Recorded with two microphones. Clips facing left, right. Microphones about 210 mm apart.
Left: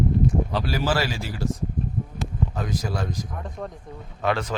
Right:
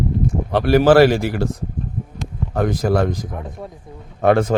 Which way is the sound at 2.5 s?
60° right (ahead or behind).